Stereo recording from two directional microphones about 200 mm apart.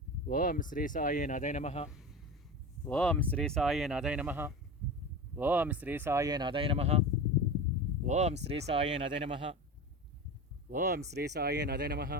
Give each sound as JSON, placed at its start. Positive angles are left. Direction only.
{"t": 0.3, "sound": "speech", "side_deg": 45}
{"t": 2.8, "sound": "speech", "side_deg": 10}
{"t": 8.0, "sound": "speech", "side_deg": -35}
{"t": 10.7, "sound": "speech", "side_deg": -45}